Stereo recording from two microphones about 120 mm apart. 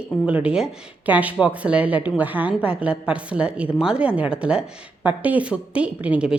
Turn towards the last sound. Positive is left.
turn(degrees=-10)  # may be behind; listen again after turning